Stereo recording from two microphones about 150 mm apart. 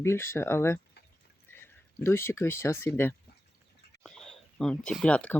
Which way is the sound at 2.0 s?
15° left (ahead or behind).